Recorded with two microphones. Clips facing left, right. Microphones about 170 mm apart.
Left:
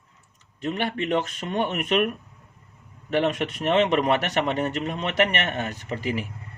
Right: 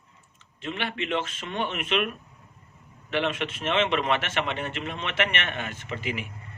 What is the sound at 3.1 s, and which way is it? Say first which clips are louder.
Speech: left 4 dB; 45° left (ahead or behind).